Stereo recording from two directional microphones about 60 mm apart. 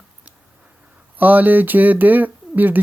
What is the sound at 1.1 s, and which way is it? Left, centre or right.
Speech, right.